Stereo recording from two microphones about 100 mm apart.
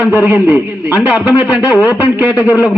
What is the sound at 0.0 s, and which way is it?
A man's voice, 20° right (ahead or behind).